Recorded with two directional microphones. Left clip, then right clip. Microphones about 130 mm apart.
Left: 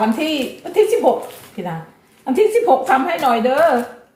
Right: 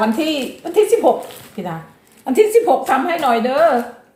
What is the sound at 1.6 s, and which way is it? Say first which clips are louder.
Speech: even; 65° right (ahead or behind).